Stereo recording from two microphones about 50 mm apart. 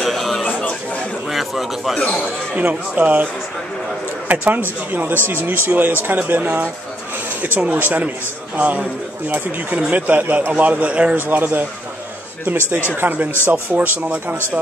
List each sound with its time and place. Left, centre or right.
0.0 s a sound: centre
2.7 s speech: right
4.3 s speech: right
7.6 s speech: right
11.1 s speech: right